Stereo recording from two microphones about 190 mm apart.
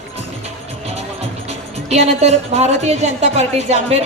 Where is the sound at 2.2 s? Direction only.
35° right (ahead or behind).